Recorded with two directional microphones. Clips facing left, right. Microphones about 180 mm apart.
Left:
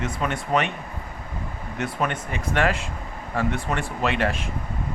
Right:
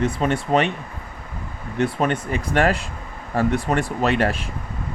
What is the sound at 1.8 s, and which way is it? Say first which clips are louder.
Speech: right 6 dB; 35° right (ahead or behind).